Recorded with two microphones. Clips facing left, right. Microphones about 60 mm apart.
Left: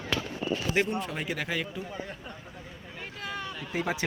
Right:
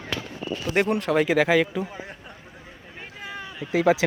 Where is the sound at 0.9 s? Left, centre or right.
Right.